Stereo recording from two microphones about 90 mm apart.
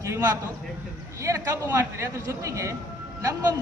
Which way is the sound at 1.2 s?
35° right (ahead or behind).